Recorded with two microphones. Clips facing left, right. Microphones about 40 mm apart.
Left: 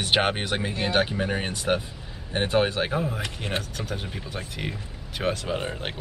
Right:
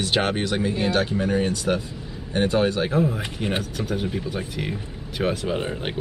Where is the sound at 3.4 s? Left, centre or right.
Centre.